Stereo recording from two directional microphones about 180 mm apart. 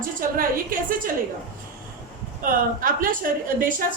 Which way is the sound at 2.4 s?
50° right (ahead or behind).